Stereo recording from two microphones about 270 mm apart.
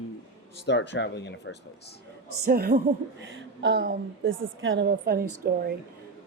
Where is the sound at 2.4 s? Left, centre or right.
Right.